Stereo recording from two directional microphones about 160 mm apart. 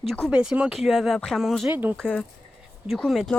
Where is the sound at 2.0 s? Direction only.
5° left (ahead or behind).